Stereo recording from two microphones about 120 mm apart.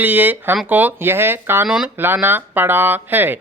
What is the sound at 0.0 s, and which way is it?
Speech, 15° right (ahead or behind).